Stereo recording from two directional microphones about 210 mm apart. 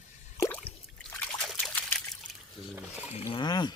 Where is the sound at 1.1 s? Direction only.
5° left (ahead or behind).